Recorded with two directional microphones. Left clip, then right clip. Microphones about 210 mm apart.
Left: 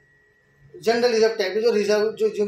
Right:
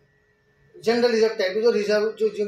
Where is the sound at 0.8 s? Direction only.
25° left (ahead or behind).